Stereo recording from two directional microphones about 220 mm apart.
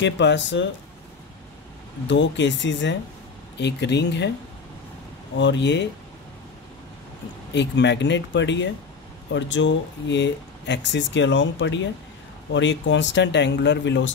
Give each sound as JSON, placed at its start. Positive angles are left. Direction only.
{"t": 0.0, "sound": "speech", "side_deg": 55}
{"t": 2.0, "sound": "speech", "side_deg": 55}
{"t": 5.4, "sound": "speech", "side_deg": 55}
{"t": 7.5, "sound": "speech", "side_deg": 55}